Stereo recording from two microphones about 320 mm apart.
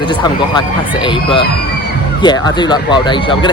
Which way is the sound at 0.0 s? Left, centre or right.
Centre.